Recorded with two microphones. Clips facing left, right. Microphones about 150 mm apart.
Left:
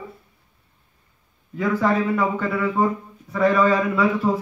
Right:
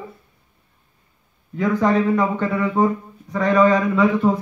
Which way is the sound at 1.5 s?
5° left (ahead or behind).